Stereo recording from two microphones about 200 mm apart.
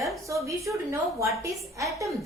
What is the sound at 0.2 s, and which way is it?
A woman's voice, 15° right (ahead or behind).